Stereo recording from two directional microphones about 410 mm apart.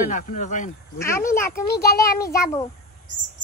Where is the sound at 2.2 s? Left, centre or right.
Centre.